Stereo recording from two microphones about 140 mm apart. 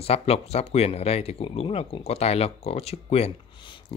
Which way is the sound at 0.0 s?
45° left (ahead or behind).